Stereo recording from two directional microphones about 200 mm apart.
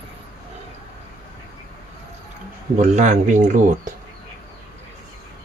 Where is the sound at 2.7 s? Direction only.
35° right (ahead or behind).